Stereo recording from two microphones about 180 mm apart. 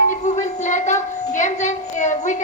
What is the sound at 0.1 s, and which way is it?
A woman's voice, 40° left (ahead or behind).